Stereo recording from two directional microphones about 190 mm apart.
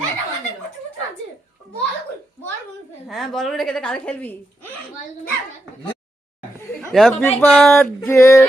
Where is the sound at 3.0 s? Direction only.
Centre (ahead or behind).